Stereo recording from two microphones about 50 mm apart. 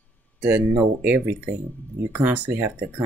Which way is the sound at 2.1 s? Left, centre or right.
Right.